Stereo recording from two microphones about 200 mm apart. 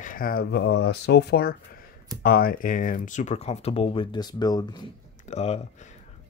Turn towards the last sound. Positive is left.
turn(degrees=35)  # may be behind; listen again after turning